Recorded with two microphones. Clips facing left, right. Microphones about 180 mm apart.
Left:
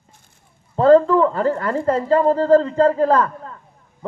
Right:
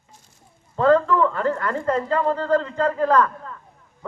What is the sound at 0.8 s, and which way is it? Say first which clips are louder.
Speech: left 5 dB; 35° left (ahead or behind).